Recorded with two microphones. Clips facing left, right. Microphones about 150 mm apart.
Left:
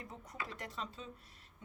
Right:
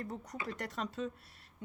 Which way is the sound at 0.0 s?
40° right (ahead or behind).